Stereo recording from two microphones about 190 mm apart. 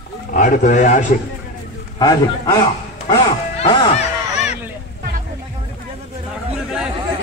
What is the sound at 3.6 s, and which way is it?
Speech, 25° left (ahead or behind).